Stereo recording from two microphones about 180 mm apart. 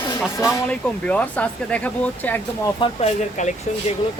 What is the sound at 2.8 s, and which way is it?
Speech, 35° left (ahead or behind).